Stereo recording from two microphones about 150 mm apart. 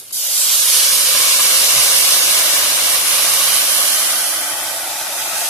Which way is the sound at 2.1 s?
20° left (ahead or behind).